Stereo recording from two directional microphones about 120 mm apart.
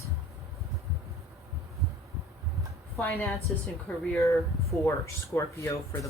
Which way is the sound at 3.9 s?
15° left (ahead or behind).